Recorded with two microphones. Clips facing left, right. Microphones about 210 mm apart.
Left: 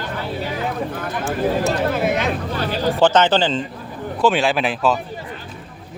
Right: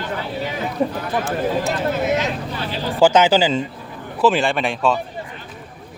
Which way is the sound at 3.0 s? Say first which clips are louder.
Right 2 dB; 10° right (ahead or behind).